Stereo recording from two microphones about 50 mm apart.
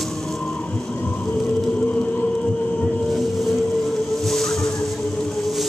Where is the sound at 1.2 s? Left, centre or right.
Left.